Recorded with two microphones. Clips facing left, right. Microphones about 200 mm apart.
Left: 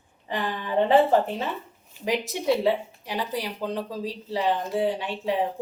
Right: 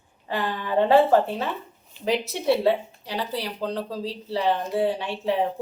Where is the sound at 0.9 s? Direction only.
20° left (ahead or behind).